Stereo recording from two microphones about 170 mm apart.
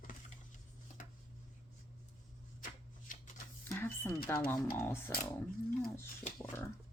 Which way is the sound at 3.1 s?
50° left (ahead or behind).